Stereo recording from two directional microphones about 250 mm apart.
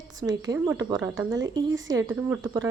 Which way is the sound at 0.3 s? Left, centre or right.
Centre.